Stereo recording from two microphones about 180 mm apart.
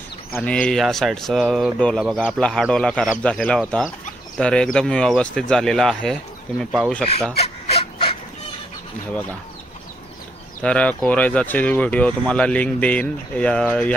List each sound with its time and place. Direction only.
0.3 s speech: 5° left (ahead or behind)
7.3 s fowl: 35° left (ahead or behind)
10.6 s speech: 5° left (ahead or behind)